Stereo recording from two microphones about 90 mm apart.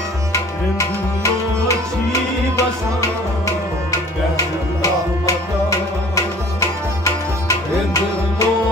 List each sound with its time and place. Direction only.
0.3 s tabla: 35° left (ahead or behind)
5.2 s tabla: 35° left (ahead or behind)